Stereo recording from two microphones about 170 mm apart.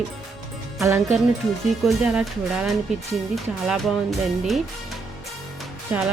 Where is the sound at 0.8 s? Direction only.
15° right (ahead or behind).